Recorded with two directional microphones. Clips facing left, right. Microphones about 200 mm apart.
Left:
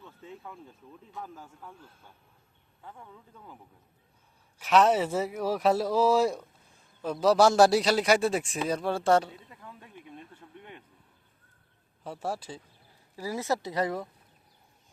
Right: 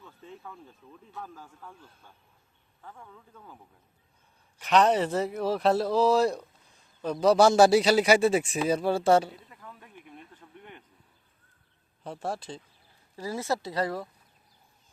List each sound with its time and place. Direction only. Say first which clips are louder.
3.3 s speech: even; 15° left (ahead or behind)
4.5 s a man's voice: even; 5° left (ahead or behind)
12.0 s speech: even; 5° left (ahead or behind)